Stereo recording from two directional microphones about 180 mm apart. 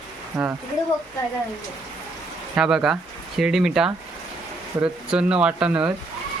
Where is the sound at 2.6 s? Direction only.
5° right (ahead or behind).